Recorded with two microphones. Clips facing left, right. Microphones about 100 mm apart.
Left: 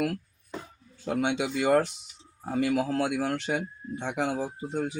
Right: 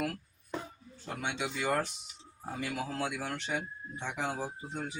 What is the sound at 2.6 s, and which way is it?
Speech, 75° left (ahead or behind).